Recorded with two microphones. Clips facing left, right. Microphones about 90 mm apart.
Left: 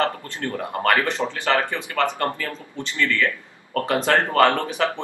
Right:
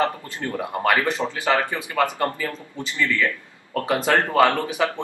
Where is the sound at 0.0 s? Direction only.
15° right (ahead or behind).